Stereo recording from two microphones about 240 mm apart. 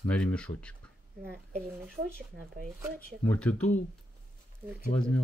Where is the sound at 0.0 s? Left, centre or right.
Centre.